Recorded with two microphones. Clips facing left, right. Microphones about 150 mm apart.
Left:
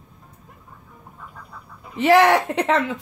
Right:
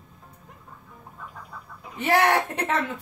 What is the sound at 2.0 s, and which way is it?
Speech, 90° left.